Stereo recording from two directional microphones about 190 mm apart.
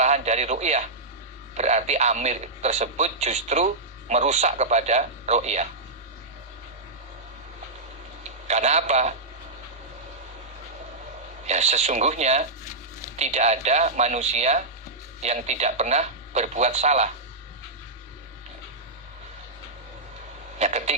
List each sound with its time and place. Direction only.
0.0 s a man's voice: 35° right (ahead or behind)
8.2 s a man's voice: 35° right (ahead or behind)
11.4 s speech: 35° right (ahead or behind)
20.6 s speech: 35° right (ahead or behind)